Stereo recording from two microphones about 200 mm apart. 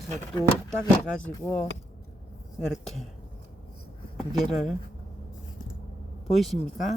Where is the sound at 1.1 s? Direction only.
5° left (ahead or behind).